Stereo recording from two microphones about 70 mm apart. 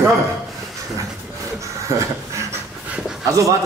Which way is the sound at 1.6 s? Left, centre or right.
Right.